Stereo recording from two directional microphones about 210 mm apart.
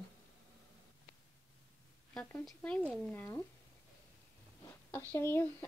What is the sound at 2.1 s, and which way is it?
Speech, 5° left (ahead or behind).